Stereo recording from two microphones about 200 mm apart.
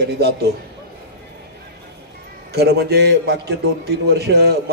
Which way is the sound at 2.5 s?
55° right (ahead or behind).